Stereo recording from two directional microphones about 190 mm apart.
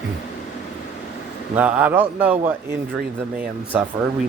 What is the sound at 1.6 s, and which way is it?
Speech, 10° right (ahead or behind).